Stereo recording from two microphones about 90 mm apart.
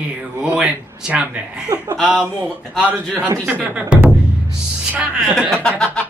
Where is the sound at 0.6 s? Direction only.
10° right (ahead or behind).